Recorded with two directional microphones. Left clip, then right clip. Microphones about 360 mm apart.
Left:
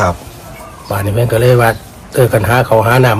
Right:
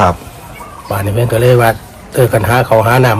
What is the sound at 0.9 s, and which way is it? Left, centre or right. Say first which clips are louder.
A man's voice: even; centre.